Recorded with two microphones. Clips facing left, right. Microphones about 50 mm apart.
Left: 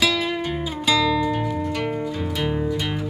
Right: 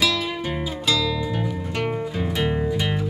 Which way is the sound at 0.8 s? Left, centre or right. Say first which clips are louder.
Left 4 dB; centre.